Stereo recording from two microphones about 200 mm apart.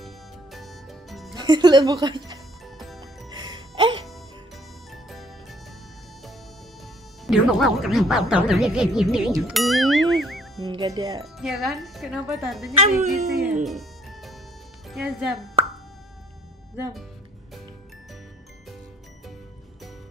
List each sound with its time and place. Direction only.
0.0 s music: centre (ahead or behind)
1.3 s speech: 20° right (ahead or behind)
3.3 s music: 20° right (ahead or behind)
4.9 s music: centre (ahead or behind)
7.2 s speech: centre (ahead or behind)
10.6 s speech: 20° right (ahead or behind)
11.3 s speech: centre (ahead or behind)
12.7 s speech: 35° right (ahead or behind)
13.7 s music: centre (ahead or behind)
14.9 s speech: centre (ahead or behind)